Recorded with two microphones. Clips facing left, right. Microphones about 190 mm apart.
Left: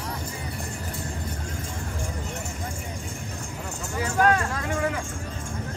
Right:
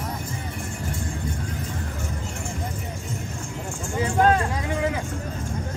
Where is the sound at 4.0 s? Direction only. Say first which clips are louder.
Right 2 dB; 25° right (ahead or behind).